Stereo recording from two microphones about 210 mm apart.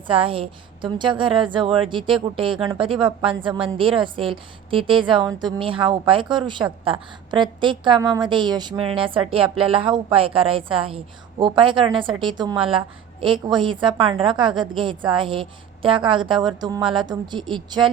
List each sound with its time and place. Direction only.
0.1 s a woman's voice: 25° right (ahead or behind)